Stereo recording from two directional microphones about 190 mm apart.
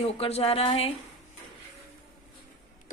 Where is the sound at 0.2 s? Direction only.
30° left (ahead or behind).